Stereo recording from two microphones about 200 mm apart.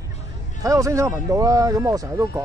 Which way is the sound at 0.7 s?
15° right (ahead or behind).